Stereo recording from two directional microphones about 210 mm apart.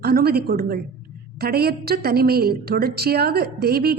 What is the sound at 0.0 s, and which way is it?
A woman's voice, 45° right (ahead or behind).